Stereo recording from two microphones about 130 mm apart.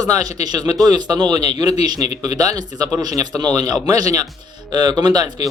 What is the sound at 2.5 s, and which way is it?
Speech, 30° right (ahead or behind).